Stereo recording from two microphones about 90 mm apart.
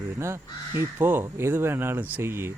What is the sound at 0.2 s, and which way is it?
A man's voice, 30° right (ahead or behind).